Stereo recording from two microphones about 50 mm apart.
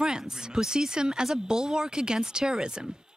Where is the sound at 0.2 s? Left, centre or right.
Centre.